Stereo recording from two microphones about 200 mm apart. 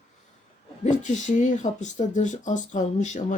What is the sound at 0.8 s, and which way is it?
Speech, 35° left (ahead or behind).